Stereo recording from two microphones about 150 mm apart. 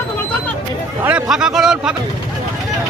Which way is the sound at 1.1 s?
5° right (ahead or behind).